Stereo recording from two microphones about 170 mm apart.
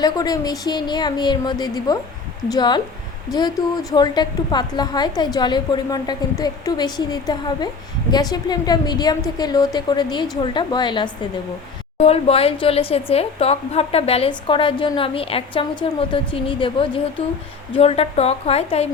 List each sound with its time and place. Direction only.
0.0 s a woman's voice: 20° left (ahead or behind)